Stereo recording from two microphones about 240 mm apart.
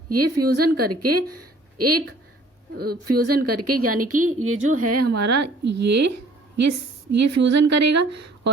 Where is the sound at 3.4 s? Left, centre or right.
Right.